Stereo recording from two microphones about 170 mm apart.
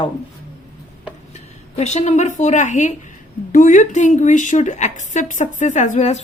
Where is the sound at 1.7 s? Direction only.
40° left (ahead or behind).